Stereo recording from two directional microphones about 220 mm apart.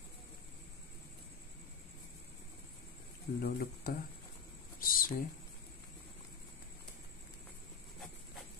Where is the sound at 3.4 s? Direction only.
40° left (ahead or behind).